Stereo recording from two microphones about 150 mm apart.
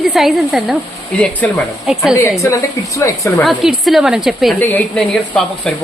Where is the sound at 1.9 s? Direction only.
5° right (ahead or behind).